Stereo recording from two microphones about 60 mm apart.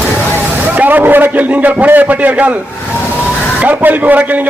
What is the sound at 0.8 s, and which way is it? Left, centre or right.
A man's voice, right.